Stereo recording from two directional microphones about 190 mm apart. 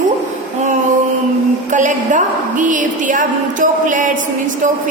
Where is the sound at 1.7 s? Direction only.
40° right (ahead or behind).